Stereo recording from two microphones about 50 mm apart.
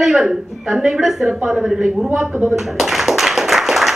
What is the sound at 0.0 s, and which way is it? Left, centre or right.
A woman's voice, centre.